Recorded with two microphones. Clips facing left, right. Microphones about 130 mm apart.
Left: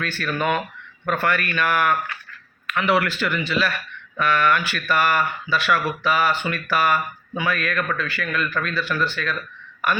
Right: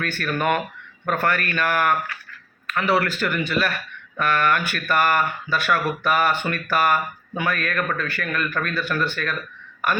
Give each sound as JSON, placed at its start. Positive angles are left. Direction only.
{"t": 0.0, "sound": "speech", "side_deg": -50}